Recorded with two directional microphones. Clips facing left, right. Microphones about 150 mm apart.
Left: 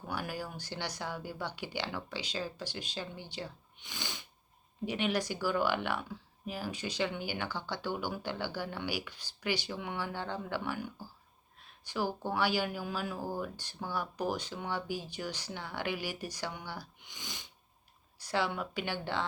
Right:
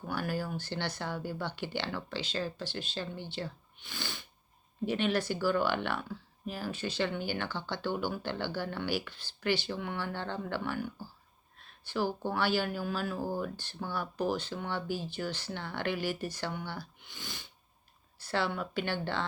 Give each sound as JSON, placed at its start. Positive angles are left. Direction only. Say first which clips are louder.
{"t": 0.1, "sound": "speech", "louder": "right 4 dB", "side_deg": 10}